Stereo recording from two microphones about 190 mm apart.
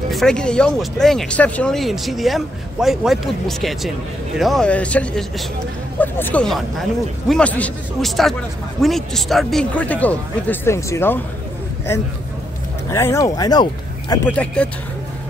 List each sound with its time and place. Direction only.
0.1 s speech: centre (ahead or behind)
12.9 s speech: 15° left (ahead or behind)
14.2 s speech: 5° left (ahead or behind)